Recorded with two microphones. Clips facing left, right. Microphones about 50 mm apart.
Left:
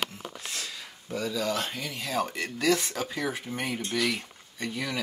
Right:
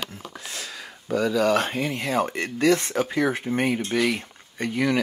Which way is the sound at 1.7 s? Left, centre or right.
Right.